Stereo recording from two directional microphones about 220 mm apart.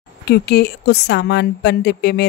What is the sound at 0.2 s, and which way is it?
Speech, 45° left (ahead or behind).